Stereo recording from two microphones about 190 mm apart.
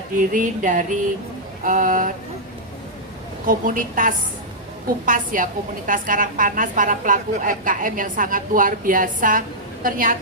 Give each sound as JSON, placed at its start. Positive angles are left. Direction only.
{"t": 0.2, "sound": "a woman's voice", "side_deg": -45}
{"t": 3.4, "sound": "a woman's voice", "side_deg": -45}